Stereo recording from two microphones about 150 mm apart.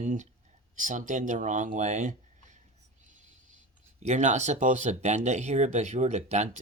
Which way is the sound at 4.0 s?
50° right (ahead or behind).